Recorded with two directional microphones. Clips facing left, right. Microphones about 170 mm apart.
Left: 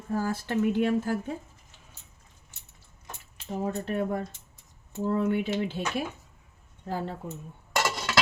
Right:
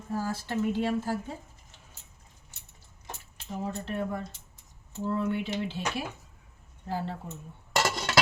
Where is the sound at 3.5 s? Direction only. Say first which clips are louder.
Left 4 dB; 50° left (ahead or behind).